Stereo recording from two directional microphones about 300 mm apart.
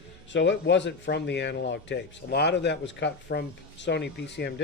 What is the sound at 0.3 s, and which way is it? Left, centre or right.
Speech, left.